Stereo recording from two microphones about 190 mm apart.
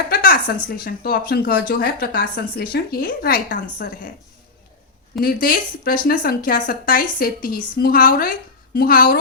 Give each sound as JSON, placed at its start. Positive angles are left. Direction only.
{"t": 0.1, "sound": "a sound", "side_deg": 55}
{"t": 0.9, "sound": "speech", "side_deg": 55}
{"t": 5.2, "sound": "speech", "side_deg": 50}